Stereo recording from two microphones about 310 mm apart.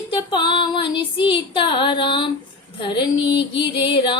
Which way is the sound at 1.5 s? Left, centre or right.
Centre.